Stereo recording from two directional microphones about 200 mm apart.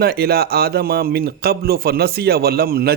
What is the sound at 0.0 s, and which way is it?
Speech, 50° right (ahead or behind).